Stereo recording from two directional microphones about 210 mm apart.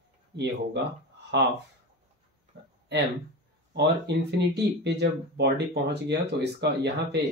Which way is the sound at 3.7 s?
55° right (ahead or behind).